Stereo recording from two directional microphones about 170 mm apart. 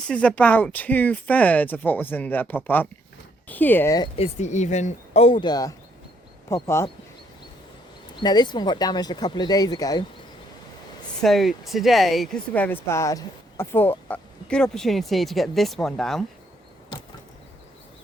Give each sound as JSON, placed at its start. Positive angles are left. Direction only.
{"t": 0.1, "sound": "speech", "side_deg": 5}
{"t": 4.2, "sound": "speech", "side_deg": 45}
{"t": 8.2, "sound": "speech", "side_deg": 25}
{"t": 11.2, "sound": "speech", "side_deg": 0}